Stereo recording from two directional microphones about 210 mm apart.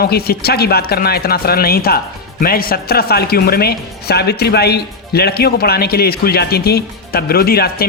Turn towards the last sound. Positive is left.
turn(degrees=45)  # may be behind; listen again after turning